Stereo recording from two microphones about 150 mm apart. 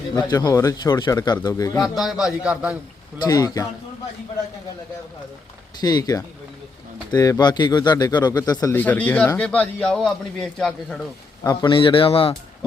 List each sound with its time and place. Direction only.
0.2 s speech: 25° left (ahead or behind)
1.8 s a man's voice: centre (ahead or behind)
3.2 s speech: 25° left (ahead or behind)
5.8 s speech: 25° left (ahead or behind)
8.7 s a man's voice: 10° left (ahead or behind)
11.4 s a man's voice: 30° left (ahead or behind)